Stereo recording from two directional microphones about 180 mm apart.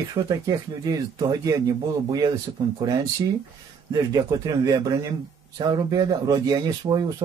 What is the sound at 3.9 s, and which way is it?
Speech, 20° right (ahead or behind).